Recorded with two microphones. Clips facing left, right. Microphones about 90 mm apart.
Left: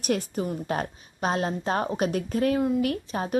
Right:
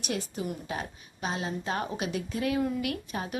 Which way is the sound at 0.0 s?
50° left (ahead or behind).